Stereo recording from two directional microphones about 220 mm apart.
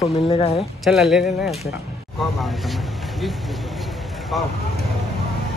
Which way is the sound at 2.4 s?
Centre (ahead or behind).